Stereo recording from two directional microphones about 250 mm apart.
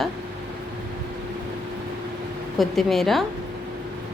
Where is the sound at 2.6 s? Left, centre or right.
Centre.